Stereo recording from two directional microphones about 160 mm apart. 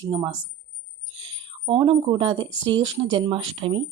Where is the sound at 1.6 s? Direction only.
35° right (ahead or behind).